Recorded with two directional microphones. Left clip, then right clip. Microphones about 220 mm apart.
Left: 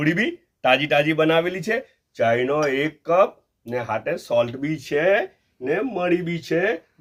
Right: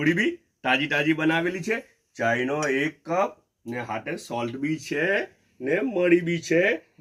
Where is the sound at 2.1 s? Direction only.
20° left (ahead or behind).